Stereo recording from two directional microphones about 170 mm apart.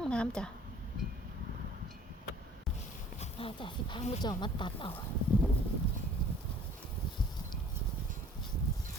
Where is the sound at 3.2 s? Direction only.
35° left (ahead or behind).